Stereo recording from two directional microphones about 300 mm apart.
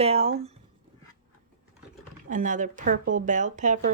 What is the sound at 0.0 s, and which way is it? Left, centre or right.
Speech, centre.